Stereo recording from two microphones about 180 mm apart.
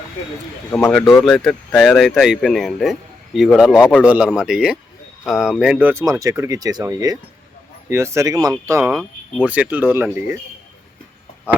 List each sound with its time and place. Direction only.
0.7 s speech: 10° left (ahead or behind)
1.0 s speech: centre (ahead or behind); by 8.9 s 15° right (ahead or behind)
8.9 s speech: centre (ahead or behind)